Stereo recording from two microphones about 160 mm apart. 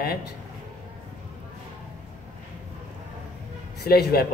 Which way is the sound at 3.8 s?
75° left (ahead or behind).